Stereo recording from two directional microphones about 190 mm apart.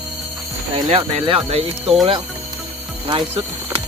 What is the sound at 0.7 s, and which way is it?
Speech, 30° right (ahead or behind).